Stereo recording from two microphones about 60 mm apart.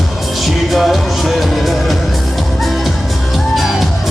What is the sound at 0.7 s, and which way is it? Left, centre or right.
Speech, centre.